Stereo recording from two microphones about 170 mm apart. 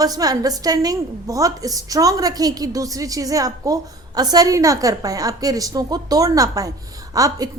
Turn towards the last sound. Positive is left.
turn(degrees=-20)  # may be behind; listen again after turning